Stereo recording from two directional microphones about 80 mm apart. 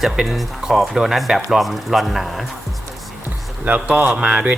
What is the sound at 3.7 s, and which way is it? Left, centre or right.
Speech, centre.